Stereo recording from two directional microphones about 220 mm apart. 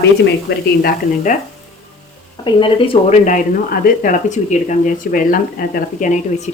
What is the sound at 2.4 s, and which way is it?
Speech, 25° left (ahead or behind).